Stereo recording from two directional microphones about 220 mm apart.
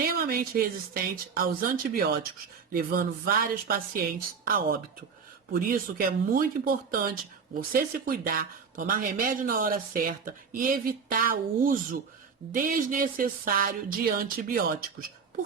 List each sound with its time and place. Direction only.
0.0 s speech: 40° right (ahead or behind)
2.7 s speech: 40° right (ahead or behind)